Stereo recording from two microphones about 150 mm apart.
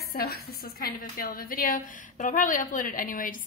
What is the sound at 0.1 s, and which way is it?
A woman's voice, 85° left.